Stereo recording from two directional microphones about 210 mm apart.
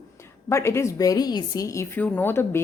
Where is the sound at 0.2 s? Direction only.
15° left (ahead or behind).